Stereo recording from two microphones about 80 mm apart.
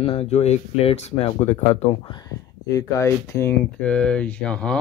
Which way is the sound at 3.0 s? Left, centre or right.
Left.